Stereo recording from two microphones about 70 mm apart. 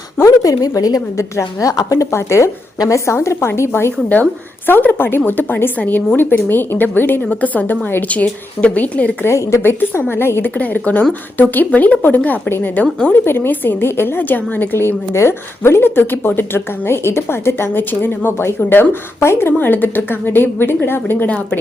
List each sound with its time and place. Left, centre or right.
0.2 s a woman's voice: left
2.1 s speech: left
3.2 s a woman's voice: left
4.1 s a woman's voice: left
5.8 s a woman's voice: centre
6.1 s a woman's voice: left
8.0 s a woman's voice: centre
9.2 s a woman's voice: left
10.5 s a woman's voice: left
21.2 s a woman's voice: left